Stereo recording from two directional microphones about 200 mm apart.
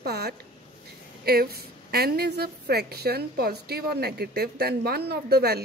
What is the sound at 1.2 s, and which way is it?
A woman's voice, 50° right (ahead or behind).